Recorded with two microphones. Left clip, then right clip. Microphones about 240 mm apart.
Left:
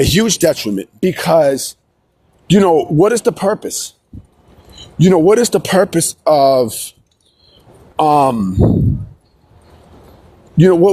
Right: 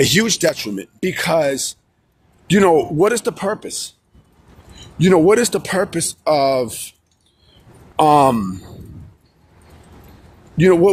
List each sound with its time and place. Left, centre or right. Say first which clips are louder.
0.0 s speech: left 2 dB; left
7.9 s speech: left 1 dB; left
10.6 s speech: left 2 dB; left